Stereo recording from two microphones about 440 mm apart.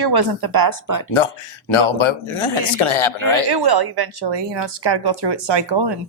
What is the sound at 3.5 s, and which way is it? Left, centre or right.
A woman's voice, right.